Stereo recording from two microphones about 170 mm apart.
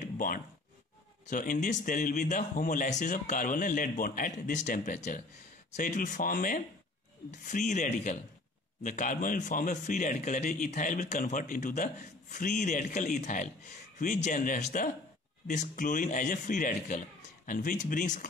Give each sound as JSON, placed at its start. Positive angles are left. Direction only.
{"t": 1.3, "sound": "a man's voice", "side_deg": 50}